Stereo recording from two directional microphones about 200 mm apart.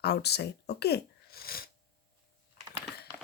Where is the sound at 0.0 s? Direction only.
55° left (ahead or behind).